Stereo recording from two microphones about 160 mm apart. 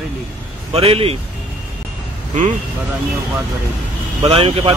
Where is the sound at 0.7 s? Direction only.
35° right (ahead or behind).